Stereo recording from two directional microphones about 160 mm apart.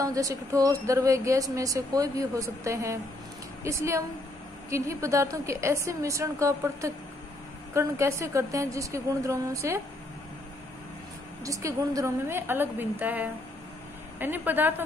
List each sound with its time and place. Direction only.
0.0 s a woman's voice: 20° right (ahead or behind)
11.4 s a woman's voice: 20° right (ahead or behind)